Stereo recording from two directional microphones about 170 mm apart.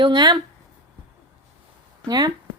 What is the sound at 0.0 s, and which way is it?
Speech, 25° right (ahead or behind).